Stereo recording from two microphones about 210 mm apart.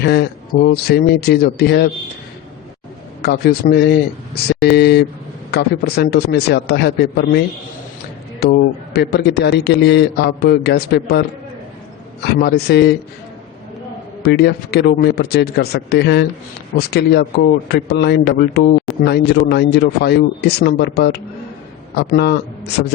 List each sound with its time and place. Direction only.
0.0 s a man's voice: 50° left (ahead or behind)
3.2 s a man's voice: 50° left (ahead or behind)
12.2 s a man's voice: 50° left (ahead or behind)
14.2 s a man's voice: 50° left (ahead or behind)